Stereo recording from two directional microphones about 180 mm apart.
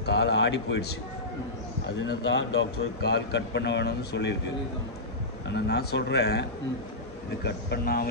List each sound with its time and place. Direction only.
0.0 s speech: 70° left (ahead or behind)
2.0 s speech: 80° left
5.5 s speech: 65° left (ahead or behind)
7.4 s speech: 60° left (ahead or behind)